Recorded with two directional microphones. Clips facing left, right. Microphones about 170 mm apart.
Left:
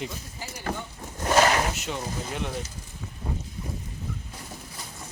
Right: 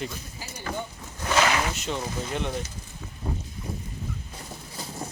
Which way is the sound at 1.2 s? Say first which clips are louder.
Left 2 dB; 40° left (ahead or behind).